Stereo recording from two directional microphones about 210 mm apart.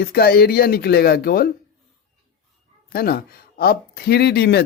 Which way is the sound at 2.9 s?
45° left (ahead or behind).